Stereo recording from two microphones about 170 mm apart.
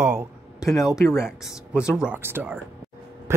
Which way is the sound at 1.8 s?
5° right (ahead or behind).